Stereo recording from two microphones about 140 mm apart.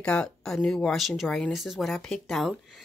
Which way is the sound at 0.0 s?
5° left (ahead or behind).